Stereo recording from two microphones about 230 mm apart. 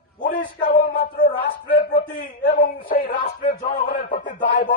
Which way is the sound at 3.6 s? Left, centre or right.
Left.